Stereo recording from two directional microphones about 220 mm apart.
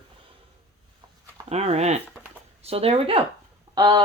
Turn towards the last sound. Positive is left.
turn(degrees=-20)  # may be behind; listen again after turning